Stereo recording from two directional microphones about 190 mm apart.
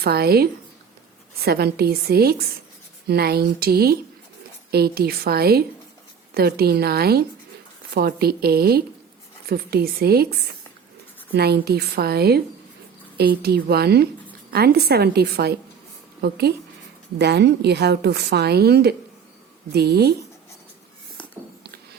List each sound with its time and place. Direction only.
0.0 s a woman's voice: 55° right (ahead or behind)